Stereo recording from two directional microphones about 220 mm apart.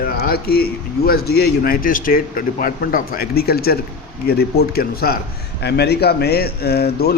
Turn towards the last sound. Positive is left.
turn(degrees=45)  # may be behind; listen again after turning